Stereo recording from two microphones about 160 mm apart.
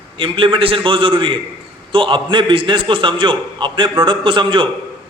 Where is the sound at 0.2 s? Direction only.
35° right (ahead or behind).